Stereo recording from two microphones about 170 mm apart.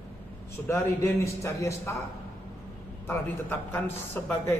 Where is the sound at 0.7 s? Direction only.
15° left (ahead or behind).